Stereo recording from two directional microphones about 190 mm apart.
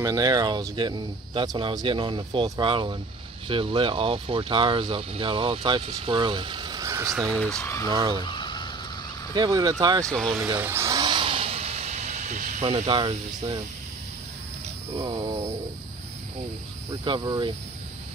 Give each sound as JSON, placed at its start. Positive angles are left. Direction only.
{"t": 0.0, "sound": "speech", "side_deg": -20}
{"t": 7.2, "sound": "speech", "side_deg": 5}
{"t": 7.9, "sound": "speech", "side_deg": -25}
{"t": 8.2, "sound": "fowl", "side_deg": 25}
{"t": 9.3, "sound": "speech", "side_deg": -20}
{"t": 10.0, "sound": "speech", "side_deg": 5}
{"t": 10.6, "sound": "vehicle", "side_deg": -15}
{"t": 12.6, "sound": "speech", "side_deg": -25}
{"t": 15.0, "sound": "speech", "side_deg": -25}
{"t": 16.9, "sound": "speech", "side_deg": -25}